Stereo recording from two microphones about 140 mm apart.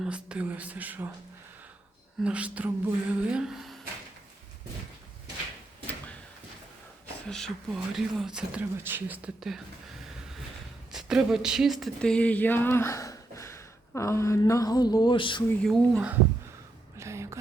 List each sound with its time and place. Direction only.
0.0 s speech: 5° right (ahead or behind)
2.2 s speech: 10° right (ahead or behind)
7.3 s speech: 5° left (ahead or behind)
10.9 s a sound: 5° right (ahead or behind); by 15.4 s 35° left (ahead or behind)
15.6 s speech: 5° left (ahead or behind)
17.0 s a sound: 20° right (ahead or behind)